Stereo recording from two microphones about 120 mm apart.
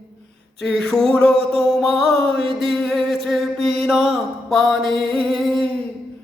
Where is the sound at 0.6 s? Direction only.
5° left (ahead or behind).